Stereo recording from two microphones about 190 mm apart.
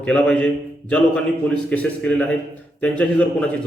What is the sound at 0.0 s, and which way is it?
A man's voice, 5° left (ahead or behind).